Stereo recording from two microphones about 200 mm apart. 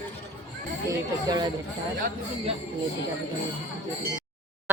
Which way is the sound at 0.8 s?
20° right (ahead or behind).